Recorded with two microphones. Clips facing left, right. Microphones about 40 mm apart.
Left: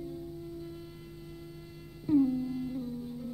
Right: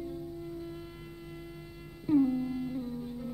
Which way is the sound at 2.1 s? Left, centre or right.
Right.